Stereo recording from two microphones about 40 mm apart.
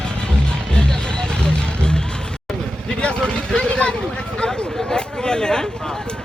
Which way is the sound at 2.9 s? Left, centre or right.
Left.